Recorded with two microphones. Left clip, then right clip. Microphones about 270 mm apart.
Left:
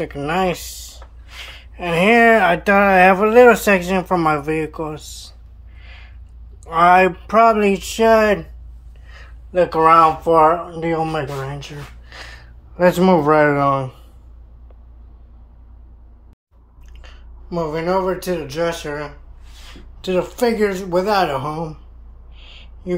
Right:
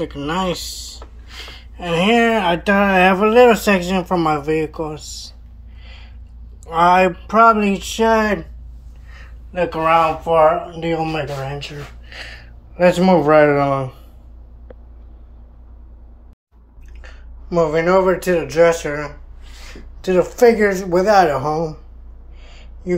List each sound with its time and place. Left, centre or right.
0.0 s speech: centre
5.8 s a sound: centre
6.6 s speech: centre
17.0 s speech: centre
20.6 s speech: centre
22.4 s a sound: centre